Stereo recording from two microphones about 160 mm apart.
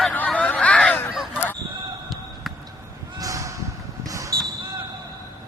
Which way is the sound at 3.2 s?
20° right (ahead or behind).